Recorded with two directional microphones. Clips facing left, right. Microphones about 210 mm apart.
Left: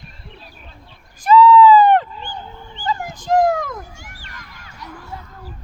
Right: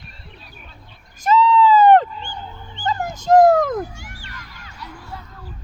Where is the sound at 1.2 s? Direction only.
45° right (ahead or behind).